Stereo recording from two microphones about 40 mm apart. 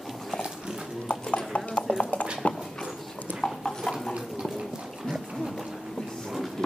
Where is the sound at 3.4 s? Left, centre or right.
Centre.